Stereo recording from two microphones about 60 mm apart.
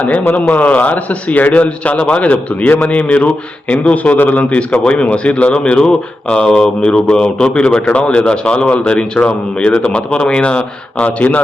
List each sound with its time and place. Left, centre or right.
0.5 s a man's voice: left